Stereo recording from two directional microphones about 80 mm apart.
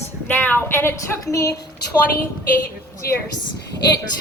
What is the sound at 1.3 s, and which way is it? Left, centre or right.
Speech, left.